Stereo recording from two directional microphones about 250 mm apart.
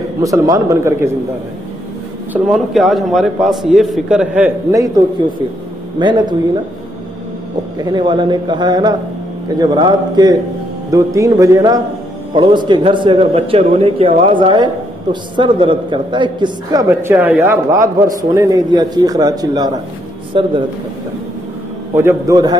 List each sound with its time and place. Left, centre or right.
0.2 s a man's voice: centre
2.3 s a man's voice: centre
5.9 s a man's voice: centre
7.8 s a man's voice: centre
21.9 s a man's voice: centre